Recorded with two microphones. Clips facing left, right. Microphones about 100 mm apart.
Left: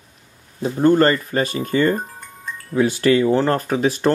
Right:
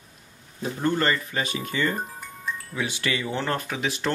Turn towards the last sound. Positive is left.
turn(degrees=40)  # may be behind; listen again after turning